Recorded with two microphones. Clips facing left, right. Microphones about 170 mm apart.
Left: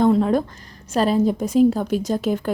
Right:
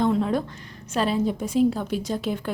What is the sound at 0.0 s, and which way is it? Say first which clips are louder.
A woman's voice: left 5 dB; 45° left (ahead or behind).